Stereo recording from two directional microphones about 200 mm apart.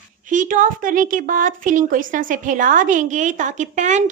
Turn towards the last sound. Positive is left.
turn(degrees=-35)  # may be behind; listen again after turning